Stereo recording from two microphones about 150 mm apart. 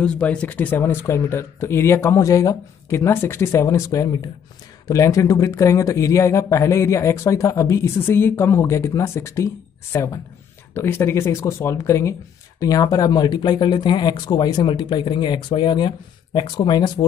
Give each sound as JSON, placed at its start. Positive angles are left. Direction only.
{"t": 0.0, "sound": "speech", "side_deg": 5}